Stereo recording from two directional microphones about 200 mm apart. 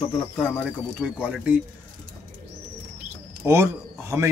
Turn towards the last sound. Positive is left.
turn(degrees=-15)  # may be behind; listen again after turning